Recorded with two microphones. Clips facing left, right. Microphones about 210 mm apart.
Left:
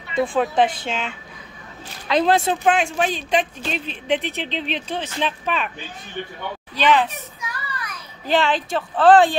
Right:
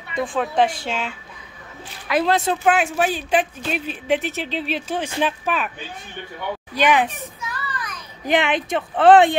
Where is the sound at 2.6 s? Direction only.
5° right (ahead or behind).